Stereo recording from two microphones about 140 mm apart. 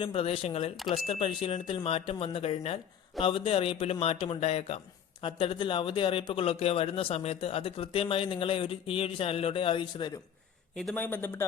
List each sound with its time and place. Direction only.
0.0 s speech: 40° left (ahead or behind)
10.9 s speech: 15° left (ahead or behind)